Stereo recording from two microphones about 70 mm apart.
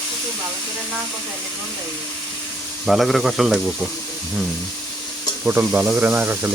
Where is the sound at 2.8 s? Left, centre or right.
Centre.